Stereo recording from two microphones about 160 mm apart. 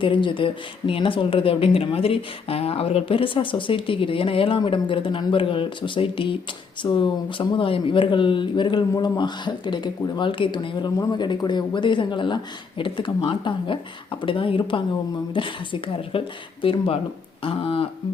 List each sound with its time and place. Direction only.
0.0 s speech: 30° left (ahead or behind)